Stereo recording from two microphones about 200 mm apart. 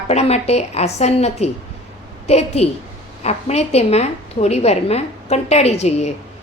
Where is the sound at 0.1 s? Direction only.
30° left (ahead or behind).